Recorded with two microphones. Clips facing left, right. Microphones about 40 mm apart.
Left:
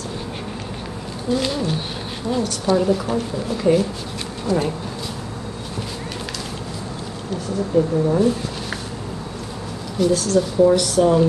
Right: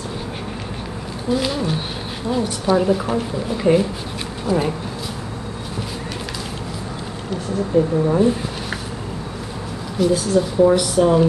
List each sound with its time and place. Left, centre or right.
1.3 s a woman's voice: centre
7.7 s a woman's voice: centre
9.9 s a woman's voice: centre